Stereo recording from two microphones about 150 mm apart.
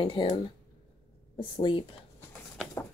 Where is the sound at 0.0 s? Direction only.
35° left (ahead or behind).